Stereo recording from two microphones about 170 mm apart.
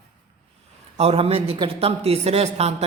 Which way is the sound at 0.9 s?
35° right (ahead or behind).